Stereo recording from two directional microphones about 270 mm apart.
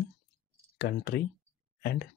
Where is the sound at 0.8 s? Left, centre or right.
Left.